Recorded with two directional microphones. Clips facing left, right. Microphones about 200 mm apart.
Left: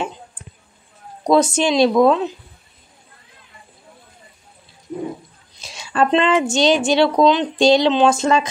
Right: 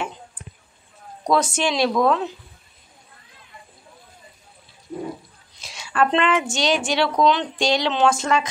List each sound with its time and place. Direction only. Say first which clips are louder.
1.2 s a woman's voice: left 5 dB; 20° left (ahead or behind)
5.6 s a woman's voice: left 2 dB; 25° left (ahead or behind)